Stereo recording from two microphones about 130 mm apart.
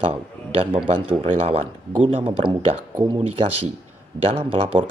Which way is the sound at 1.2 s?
50° right (ahead or behind).